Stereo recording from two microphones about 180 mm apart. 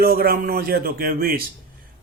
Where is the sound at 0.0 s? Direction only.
55° right (ahead or behind).